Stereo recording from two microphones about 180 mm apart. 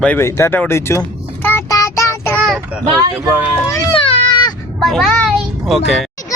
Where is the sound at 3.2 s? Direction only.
10° right (ahead or behind).